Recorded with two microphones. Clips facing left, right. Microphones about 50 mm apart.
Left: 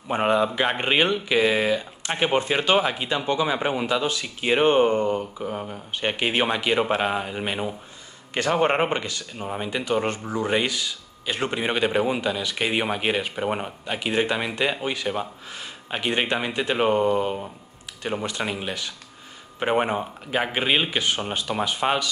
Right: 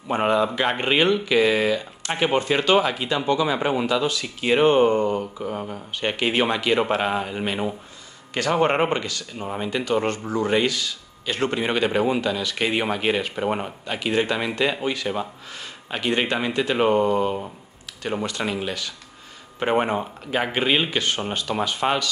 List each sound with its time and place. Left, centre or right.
0.1 s speech: centre
3.5 s speech: centre
4.1 s speech: left; by 13.9 s centre
13.9 s speech: centre
16.7 s speech: centre
18.4 s speech: centre